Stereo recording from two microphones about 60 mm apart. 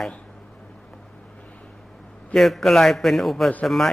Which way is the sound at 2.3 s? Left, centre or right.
Centre.